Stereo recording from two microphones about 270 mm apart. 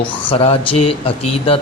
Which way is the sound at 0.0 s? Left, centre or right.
Centre.